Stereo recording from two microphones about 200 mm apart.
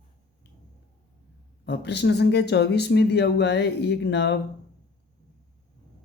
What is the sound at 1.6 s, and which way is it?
Speech, 55° left (ahead or behind).